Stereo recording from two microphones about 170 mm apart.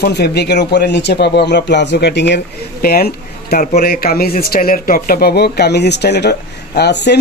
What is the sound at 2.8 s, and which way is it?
Speech, 65° left (ahead or behind).